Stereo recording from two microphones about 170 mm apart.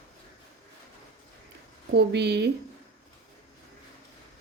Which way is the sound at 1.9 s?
80° right.